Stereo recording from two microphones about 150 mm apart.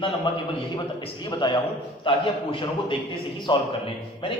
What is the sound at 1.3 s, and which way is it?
A man's voice, 30° left (ahead or behind).